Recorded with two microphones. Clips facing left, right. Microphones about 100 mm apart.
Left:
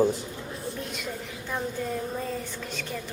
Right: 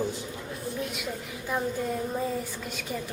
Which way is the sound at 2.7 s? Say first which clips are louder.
Even; 10° right (ahead or behind).